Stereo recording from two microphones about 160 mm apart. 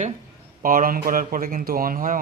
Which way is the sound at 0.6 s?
60° right (ahead or behind).